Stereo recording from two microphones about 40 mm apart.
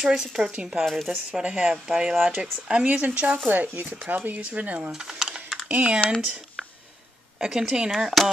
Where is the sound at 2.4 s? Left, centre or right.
Right.